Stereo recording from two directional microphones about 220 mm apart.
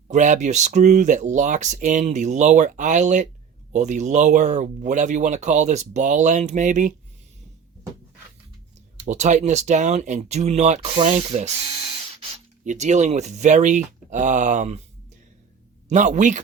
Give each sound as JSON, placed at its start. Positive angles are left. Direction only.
{"t": 0.1, "sound": "speech", "side_deg": -35}
{"t": 9.0, "sound": "speech", "side_deg": -30}
{"t": 12.6, "sound": "speech", "side_deg": -35}
{"t": 15.9, "sound": "speech", "side_deg": -35}